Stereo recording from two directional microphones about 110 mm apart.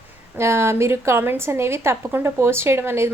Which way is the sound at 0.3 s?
25° right (ahead or behind).